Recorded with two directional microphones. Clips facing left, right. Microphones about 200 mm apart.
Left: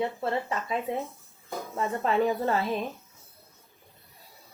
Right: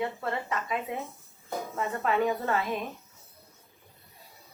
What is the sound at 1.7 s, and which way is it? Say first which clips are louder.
Speech: left 2 dB; 30° left (ahead or behind).